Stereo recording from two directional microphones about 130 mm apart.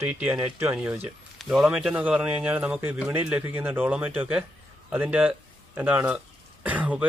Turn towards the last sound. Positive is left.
turn(degrees=-10)  # may be behind; listen again after turning